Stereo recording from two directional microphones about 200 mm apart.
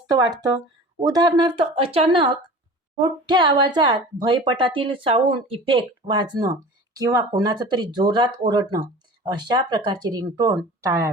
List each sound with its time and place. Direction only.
0.1 s speech: 20° right (ahead or behind)